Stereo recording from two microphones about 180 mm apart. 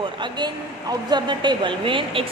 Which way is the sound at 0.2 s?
25° right (ahead or behind).